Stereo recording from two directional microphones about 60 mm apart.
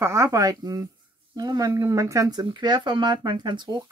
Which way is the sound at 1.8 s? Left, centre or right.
Right.